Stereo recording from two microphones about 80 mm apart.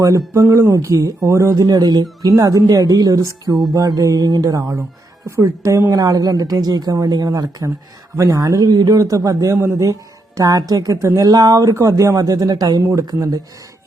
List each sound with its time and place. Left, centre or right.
0.3 s a man's voice: right
2.3 s a man's voice: right
3.2 s speech: right
3.5 s music: centre
3.8 s a man's voice: right
8.1 s a man's voice: right
13.1 s speech: right